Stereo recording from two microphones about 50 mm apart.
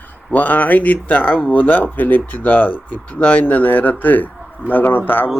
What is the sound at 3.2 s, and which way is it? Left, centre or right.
Speech, left.